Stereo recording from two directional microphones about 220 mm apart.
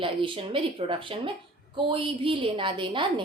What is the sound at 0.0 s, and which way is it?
A child's voice, 25° right (ahead or behind).